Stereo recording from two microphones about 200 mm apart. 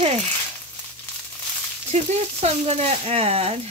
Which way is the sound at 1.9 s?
35° right (ahead or behind).